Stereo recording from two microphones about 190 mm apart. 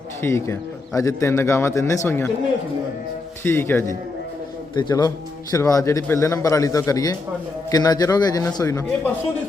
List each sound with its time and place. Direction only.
0.2 s a man's voice: 15° left (ahead or behind)
3.4 s a man's voice: 10° left (ahead or behind)
4.7 s a man's voice: 20° left (ahead or behind)